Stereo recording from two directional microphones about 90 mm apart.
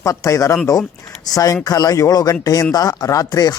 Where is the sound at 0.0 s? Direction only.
35° left (ahead or behind).